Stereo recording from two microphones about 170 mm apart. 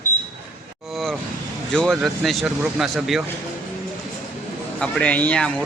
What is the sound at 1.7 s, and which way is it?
Speech, 5° left (ahead or behind).